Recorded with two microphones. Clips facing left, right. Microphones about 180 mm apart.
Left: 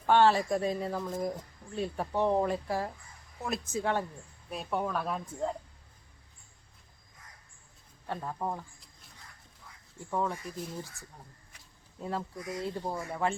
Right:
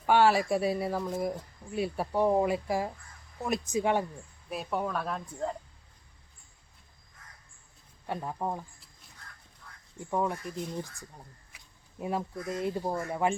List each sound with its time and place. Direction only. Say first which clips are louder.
0.0 s speech: even; 10° right (ahead or behind)
4.4 s speech: right 1 dB; 5° right (ahead or behind)
8.0 s speech: right 2 dB; 15° right (ahead or behind)
10.0 s speech: right 2 dB; 15° right (ahead or behind)
10.3 s speech: right 3 dB; 5° left (ahead or behind)
11.9 s speech: right 3 dB; 15° right (ahead or behind)